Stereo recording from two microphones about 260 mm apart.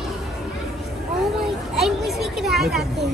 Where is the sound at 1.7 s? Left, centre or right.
Centre.